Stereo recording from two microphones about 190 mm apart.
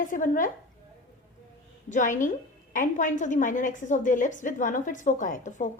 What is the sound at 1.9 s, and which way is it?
A woman's voice, 40° left (ahead or behind).